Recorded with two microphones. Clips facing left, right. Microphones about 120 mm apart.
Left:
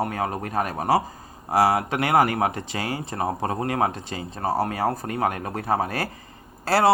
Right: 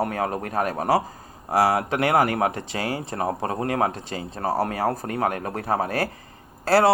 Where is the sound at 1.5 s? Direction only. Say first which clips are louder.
Even; 50° right (ahead or behind).